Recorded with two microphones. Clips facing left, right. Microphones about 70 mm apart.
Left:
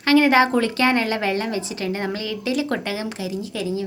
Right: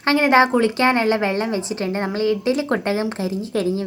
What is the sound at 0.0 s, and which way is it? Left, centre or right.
Speech, right.